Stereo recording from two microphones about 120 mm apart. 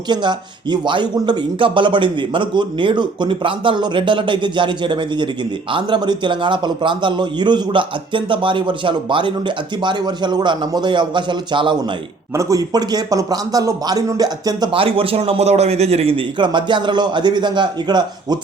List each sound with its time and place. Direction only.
0.1 s a man's voice: 40° right (ahead or behind)
12.3 s a man's voice: 25° right (ahead or behind)
14.8 s a man's voice: 50° right (ahead or behind)